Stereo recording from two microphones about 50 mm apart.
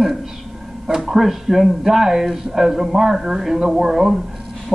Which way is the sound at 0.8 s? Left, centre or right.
Centre.